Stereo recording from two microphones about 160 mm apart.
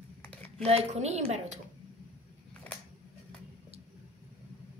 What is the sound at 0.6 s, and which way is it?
Speech, 40° right (ahead or behind).